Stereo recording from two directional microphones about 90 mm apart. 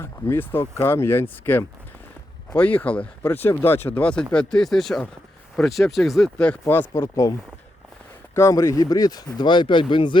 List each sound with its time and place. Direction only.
0.0 s speech: 25° left (ahead or behind); by 6.6 s 10° left (ahead or behind)
6.7 s speech: 25° left (ahead or behind)
8.4 s speech: 35° left (ahead or behind); by 10.2 s 65° left (ahead or behind)